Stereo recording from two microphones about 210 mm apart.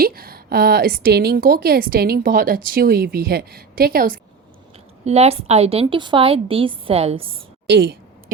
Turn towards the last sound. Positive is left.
turn(degrees=-50)  # may be behind; listen again after turning